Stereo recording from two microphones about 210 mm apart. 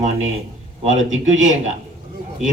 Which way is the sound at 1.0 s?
65° right (ahead or behind).